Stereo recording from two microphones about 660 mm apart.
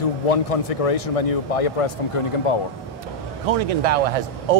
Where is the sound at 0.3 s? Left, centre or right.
Left.